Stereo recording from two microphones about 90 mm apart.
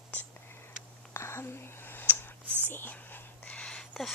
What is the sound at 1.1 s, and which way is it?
Whispering, 30° left (ahead or behind).